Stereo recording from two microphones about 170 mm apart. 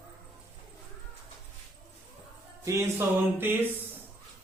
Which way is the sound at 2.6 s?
15° right (ahead or behind).